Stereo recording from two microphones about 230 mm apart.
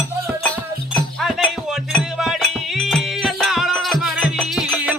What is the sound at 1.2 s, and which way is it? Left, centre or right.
Music, centre.